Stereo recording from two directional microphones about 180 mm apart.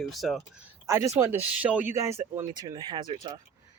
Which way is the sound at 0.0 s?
Centre (ahead or behind).